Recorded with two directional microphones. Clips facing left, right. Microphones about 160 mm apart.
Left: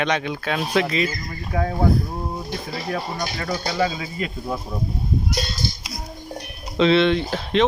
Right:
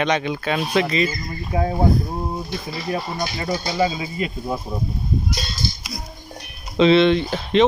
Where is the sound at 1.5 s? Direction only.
20° right (ahead or behind).